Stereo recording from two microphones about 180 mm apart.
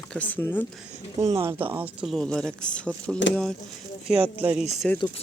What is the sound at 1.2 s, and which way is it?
Speech, 15° right (ahead or behind).